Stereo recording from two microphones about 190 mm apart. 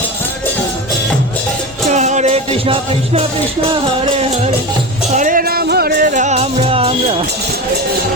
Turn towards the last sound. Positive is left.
turn(degrees=-30)  # may be behind; listen again after turning